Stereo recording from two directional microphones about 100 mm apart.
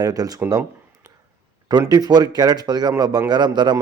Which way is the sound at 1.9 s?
40° right (ahead or behind).